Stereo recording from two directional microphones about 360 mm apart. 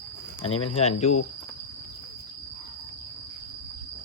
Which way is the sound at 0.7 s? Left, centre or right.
Centre.